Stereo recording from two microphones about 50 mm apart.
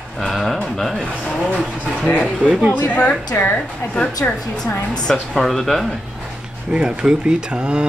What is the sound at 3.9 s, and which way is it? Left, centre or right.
Speech, centre.